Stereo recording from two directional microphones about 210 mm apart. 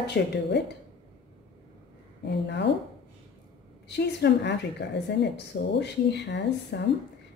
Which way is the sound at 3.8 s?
55° left (ahead or behind).